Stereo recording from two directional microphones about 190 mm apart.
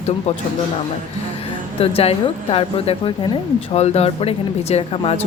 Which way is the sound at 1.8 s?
30° left (ahead or behind).